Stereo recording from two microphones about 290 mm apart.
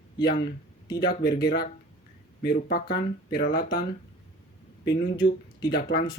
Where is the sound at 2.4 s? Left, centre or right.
Left.